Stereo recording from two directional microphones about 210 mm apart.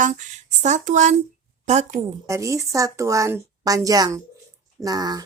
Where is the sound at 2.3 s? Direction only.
15° right (ahead or behind).